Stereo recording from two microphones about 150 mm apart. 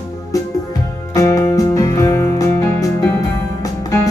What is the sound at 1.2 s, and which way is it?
Music, 20° left (ahead or behind).